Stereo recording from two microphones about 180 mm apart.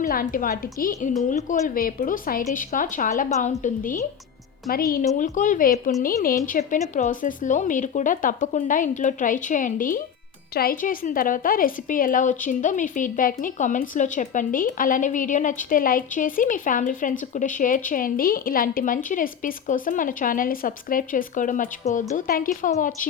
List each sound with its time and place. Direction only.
0.0 s a woman's voice: 50° left (ahead or behind)